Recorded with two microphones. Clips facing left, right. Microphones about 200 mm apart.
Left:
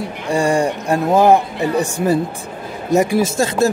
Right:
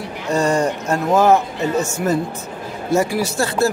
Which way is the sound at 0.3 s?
15° left (ahead or behind).